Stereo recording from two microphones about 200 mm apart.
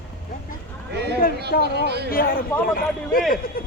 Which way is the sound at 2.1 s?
45° left (ahead or behind).